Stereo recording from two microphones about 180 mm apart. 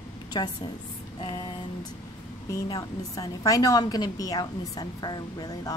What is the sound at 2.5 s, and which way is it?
A woman's voice, 20° left (ahead or behind).